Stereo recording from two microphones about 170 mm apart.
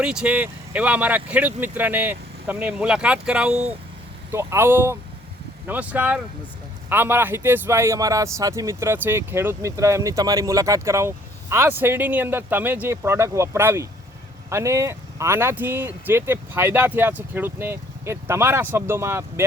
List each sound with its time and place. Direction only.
0.0 s speech: 5° right (ahead or behind)